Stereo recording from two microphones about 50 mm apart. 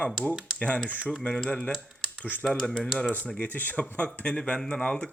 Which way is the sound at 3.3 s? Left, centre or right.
Left.